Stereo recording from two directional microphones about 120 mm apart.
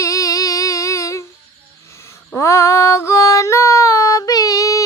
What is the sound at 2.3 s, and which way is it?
Yodeling, 25° left (ahead or behind).